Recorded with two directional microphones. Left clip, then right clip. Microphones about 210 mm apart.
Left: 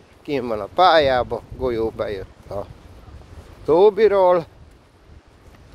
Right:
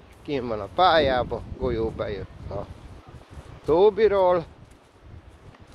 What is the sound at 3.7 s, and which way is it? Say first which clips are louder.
Speech: left 4 dB; 35° left (ahead or behind).